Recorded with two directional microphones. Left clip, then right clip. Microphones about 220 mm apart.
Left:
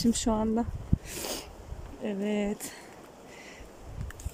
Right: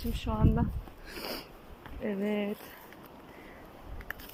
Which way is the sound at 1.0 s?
10° left (ahead or behind).